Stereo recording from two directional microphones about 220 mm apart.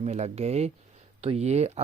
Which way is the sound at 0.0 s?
30° right (ahead or behind).